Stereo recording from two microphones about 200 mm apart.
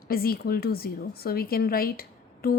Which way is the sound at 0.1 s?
50° left (ahead or behind).